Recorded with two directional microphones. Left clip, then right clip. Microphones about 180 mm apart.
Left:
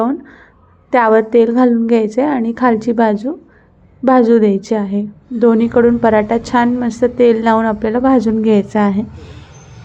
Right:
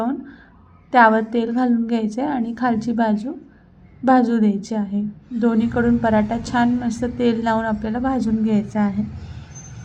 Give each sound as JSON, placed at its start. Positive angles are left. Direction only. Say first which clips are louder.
{"t": 0.0, "sound": "a woman's voice", "louder": "left 7 dB", "side_deg": 15}